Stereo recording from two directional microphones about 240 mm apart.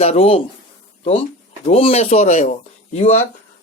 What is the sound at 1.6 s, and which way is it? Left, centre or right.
Speech, left.